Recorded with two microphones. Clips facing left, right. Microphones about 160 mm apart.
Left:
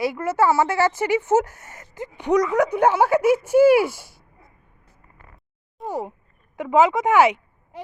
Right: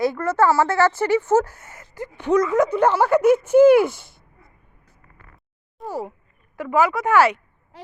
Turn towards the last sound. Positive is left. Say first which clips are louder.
# left 1 dB
turn(degrees=15)  # may be behind; listen again after turning